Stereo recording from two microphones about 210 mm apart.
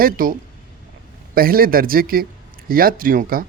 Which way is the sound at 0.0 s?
40° right (ahead or behind).